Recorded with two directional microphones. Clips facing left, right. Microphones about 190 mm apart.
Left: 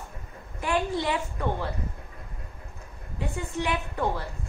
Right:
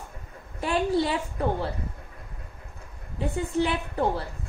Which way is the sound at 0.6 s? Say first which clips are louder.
Right 3 dB; 30° right (ahead or behind).